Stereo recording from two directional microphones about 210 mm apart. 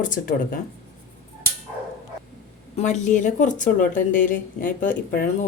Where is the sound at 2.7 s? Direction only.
35° left (ahead or behind).